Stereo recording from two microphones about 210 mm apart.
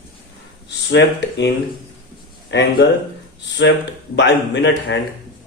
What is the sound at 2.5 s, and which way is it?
A man's voice, 55° left (ahead or behind).